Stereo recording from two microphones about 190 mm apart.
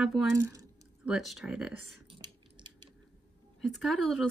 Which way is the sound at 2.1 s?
25° right (ahead or behind).